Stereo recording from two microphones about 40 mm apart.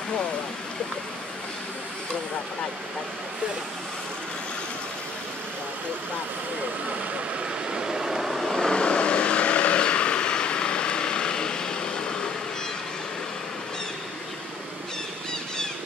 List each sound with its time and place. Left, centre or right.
7.7 s vehicle: centre
8.5 s vehicle: left